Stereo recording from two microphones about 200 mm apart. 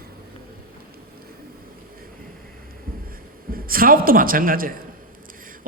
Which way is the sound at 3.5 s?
45° right (ahead or behind).